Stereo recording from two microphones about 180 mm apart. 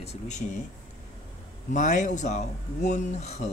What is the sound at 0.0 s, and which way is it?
Speech, 40° left (ahead or behind).